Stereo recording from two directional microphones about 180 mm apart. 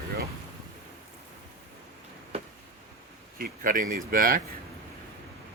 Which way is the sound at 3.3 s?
50° right (ahead or behind).